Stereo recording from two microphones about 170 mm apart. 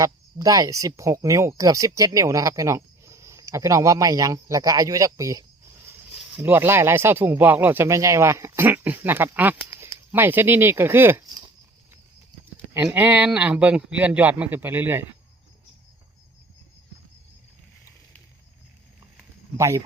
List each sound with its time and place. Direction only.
0.0 s speech: 20° right (ahead or behind)
12.7 s a man's voice: 10° right (ahead or behind)
19.5 s a man's voice: 15° right (ahead or behind)